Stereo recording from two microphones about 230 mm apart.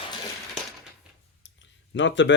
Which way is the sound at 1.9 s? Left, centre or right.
Left.